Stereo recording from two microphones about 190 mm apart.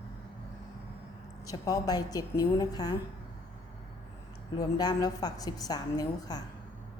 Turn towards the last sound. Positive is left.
turn(degrees=20)  # may be behind; listen again after turning